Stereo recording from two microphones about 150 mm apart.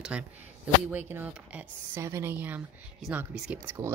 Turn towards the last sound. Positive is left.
turn(degrees=-15)  # may be behind; listen again after turning